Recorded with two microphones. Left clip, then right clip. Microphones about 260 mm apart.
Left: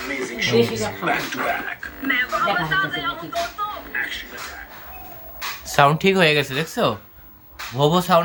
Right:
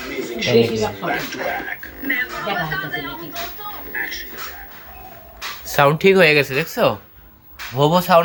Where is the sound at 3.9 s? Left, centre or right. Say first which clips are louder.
Right 2 dB; centre.